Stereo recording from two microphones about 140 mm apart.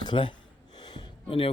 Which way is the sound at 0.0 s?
35° left (ahead or behind).